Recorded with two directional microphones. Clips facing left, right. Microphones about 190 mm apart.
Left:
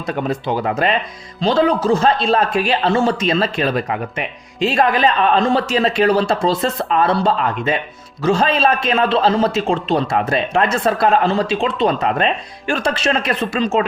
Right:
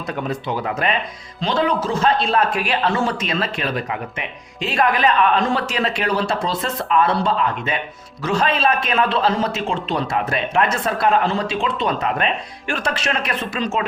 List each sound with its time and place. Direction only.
0.4 s a man's voice: 35° left (ahead or behind)
8.2 s a man's voice: 30° left (ahead or behind)